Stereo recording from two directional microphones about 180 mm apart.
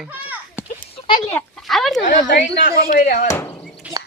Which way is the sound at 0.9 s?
30° left (ahead or behind).